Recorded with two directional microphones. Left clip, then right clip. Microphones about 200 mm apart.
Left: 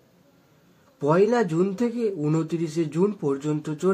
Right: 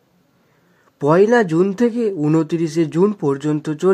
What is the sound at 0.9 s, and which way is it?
A man's voice, 50° right (ahead or behind).